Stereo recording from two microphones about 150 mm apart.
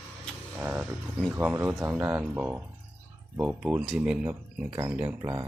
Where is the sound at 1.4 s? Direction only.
10° right (ahead or behind).